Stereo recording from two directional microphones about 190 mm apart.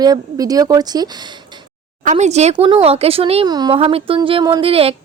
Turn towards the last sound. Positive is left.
turn(degrees=-30)  # may be behind; listen again after turning